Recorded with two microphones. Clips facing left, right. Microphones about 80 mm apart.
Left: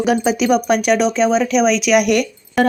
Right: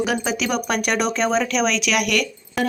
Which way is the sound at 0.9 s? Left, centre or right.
Centre.